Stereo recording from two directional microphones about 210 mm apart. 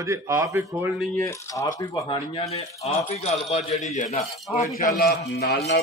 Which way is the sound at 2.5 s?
30° left (ahead or behind).